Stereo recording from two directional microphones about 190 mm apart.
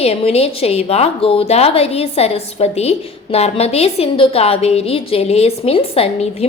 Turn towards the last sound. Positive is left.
turn(degrees=30)  # may be behind; listen again after turning